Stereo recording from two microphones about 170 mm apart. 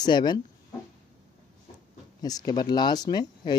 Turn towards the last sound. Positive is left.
turn(degrees=25)  # may be behind; listen again after turning